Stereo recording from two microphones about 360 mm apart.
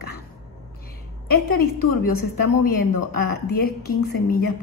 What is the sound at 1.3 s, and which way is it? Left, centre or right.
Speech, left.